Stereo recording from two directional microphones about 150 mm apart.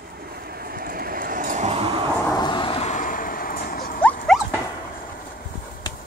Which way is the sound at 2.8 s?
55° left (ahead or behind).